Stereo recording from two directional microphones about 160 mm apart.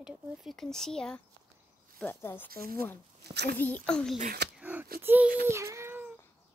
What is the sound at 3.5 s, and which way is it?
Speech, 10° left (ahead or behind).